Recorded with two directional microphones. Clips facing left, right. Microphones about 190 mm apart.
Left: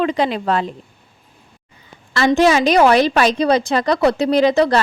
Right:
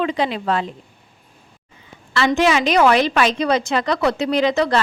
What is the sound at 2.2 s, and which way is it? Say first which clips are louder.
A woman's voice: left 3 dB; 35° left (ahead or behind).